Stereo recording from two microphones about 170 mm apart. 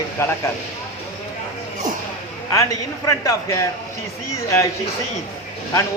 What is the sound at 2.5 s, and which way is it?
Speech, 20° left (ahead or behind).